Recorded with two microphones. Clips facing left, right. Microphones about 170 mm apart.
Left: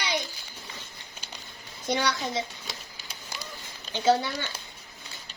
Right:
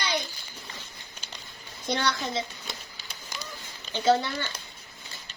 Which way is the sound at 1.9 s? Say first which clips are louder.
Left 1 dB; 10° left (ahead or behind).